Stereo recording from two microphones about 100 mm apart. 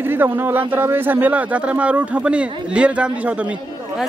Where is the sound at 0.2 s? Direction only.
20° right (ahead or behind).